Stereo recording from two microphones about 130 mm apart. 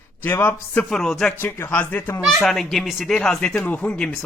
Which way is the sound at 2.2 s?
Centre (ahead or behind).